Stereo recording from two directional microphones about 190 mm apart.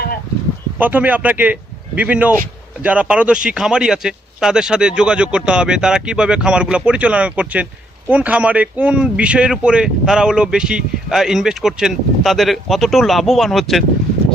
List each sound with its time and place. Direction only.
0.8 s speech: 10° right (ahead or behind)